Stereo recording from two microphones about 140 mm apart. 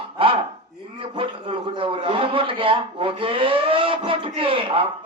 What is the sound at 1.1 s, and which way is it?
A man's voice, 40° right (ahead or behind).